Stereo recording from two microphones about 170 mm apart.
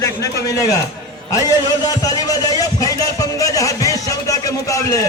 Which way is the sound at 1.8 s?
20° left (ahead or behind).